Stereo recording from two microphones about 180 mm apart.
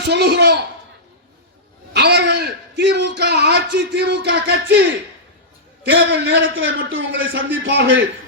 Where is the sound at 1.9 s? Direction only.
65° right (ahead or behind).